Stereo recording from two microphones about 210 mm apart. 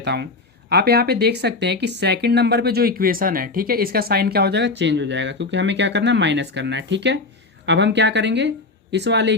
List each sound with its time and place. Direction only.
0.0 s speech: 55° right (ahead or behind)